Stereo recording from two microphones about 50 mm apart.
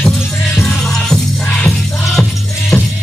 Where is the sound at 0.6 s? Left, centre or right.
Centre.